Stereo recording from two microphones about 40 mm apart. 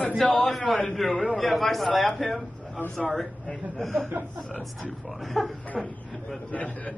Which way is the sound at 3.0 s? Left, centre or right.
Centre.